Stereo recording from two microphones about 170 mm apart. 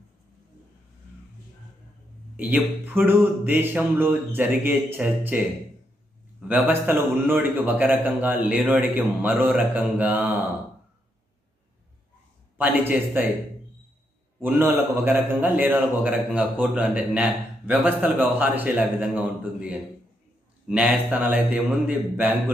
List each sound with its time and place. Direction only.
2.3 s a man's voice: 10° right (ahead or behind)
6.5 s a man's voice: 10° right (ahead or behind)
12.5 s a man's voice: 10° right (ahead or behind)
14.4 s a man's voice: 10° right (ahead or behind)